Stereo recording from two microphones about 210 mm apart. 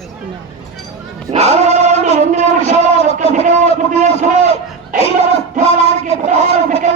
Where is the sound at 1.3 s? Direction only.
30° right (ahead or behind).